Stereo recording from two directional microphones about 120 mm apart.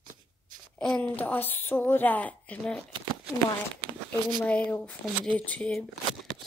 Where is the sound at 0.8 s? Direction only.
10° left (ahead or behind).